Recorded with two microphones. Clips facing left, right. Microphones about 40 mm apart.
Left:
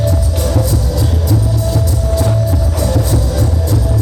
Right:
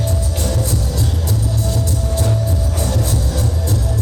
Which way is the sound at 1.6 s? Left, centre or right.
Left.